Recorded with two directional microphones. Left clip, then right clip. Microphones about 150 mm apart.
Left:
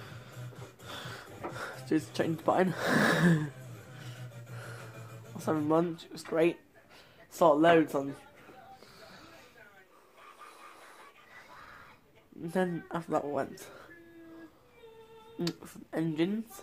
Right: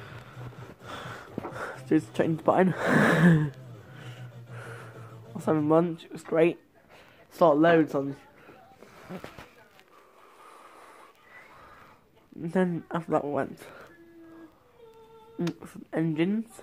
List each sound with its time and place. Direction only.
0.8 s a sound: 20° right (ahead or behind)
5.4 s speech: 20° right (ahead or behind)
12.4 s speech: 25° right (ahead or behind)
15.3 s speech: 20° right (ahead or behind)